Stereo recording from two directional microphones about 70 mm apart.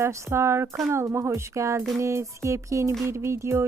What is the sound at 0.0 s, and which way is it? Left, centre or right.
Speech, right.